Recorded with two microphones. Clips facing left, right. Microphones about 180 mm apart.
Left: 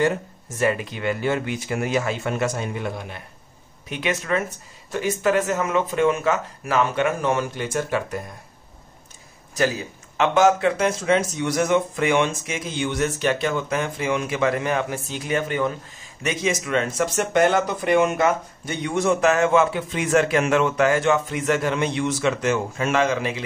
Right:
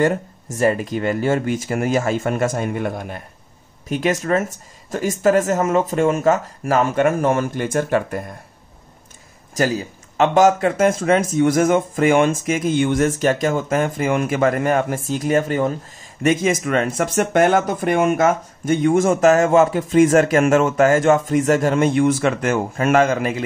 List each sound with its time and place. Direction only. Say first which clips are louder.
0.6 s speech: right 5 dB; 40° right (ahead or behind)
9.6 s speech: right 3 dB; 40° right (ahead or behind)